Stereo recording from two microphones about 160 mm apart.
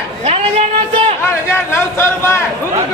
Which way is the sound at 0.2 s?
40° right (ahead or behind).